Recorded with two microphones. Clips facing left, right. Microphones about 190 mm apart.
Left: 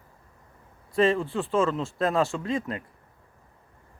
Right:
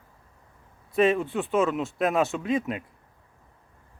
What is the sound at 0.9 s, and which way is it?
Speech, 20° right (ahead or behind).